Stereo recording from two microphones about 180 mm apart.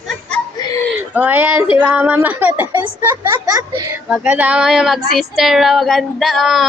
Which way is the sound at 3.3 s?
25° right (ahead or behind).